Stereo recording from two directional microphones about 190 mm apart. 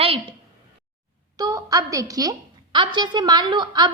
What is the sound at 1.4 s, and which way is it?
A woman's voice, 20° right (ahead or behind).